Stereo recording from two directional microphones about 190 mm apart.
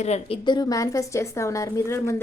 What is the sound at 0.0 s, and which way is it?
A woman's voice, 30° left (ahead or behind).